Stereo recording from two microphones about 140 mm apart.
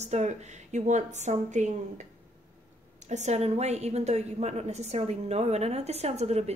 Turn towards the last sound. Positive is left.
turn(degrees=-50)  # may be behind; listen again after turning